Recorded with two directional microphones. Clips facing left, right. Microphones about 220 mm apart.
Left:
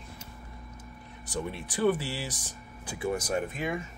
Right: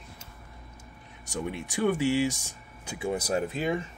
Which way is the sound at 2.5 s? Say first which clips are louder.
Even; 25° right (ahead or behind).